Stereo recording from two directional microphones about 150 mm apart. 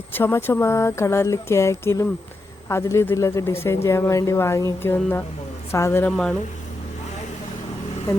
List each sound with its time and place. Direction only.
0.1 s speech: 15° left (ahead or behind)
6.1 s speech: 5° left (ahead or behind)